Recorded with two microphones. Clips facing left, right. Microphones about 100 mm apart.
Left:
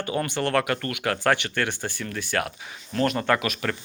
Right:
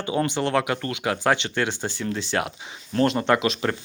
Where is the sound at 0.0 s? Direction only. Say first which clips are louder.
Right 2 dB; 20° right (ahead or behind).